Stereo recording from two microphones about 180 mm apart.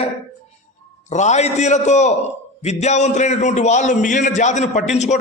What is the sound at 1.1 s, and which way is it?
A man's voice, 40° left (ahead or behind).